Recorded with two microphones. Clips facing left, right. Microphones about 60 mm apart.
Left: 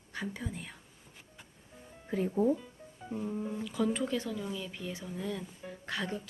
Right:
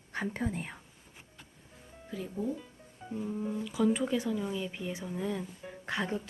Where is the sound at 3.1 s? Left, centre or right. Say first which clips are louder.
Right 1 dB; centre.